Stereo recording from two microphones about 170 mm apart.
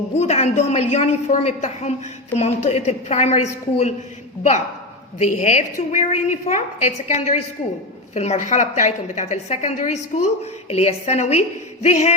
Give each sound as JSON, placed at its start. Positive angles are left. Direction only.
{"t": 0.2, "sound": "a woman's voice", "side_deg": 40}
{"t": 5.2, "sound": "a woman's voice", "side_deg": 45}